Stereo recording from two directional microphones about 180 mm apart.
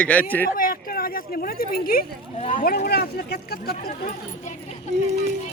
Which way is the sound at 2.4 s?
40° left (ahead or behind).